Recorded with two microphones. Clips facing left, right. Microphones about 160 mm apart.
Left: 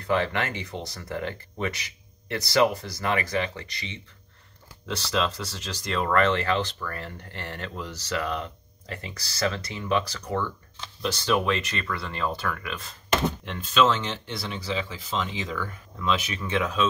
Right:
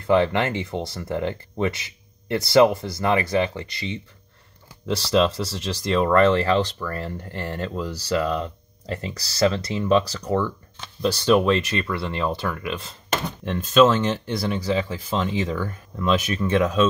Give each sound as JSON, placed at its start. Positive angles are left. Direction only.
{"t": 0.0, "sound": "speech", "side_deg": -25}
{"t": 13.5, "sound": "speech", "side_deg": -45}